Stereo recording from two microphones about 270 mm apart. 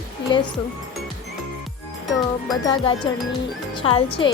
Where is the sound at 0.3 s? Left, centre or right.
Centre.